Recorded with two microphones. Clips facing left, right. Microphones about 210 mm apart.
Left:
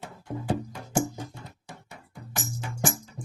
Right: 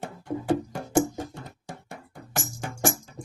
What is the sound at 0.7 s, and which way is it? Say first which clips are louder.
Music: right 5 dB; 50° right (ahead or behind).